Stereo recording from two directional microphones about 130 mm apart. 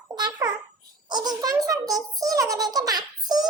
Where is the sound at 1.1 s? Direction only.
30° right (ahead or behind).